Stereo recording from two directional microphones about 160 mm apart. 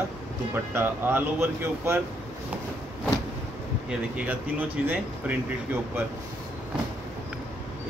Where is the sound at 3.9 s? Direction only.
10° right (ahead or behind).